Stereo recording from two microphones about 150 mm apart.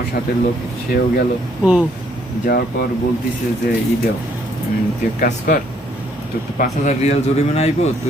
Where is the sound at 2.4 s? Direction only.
90° left.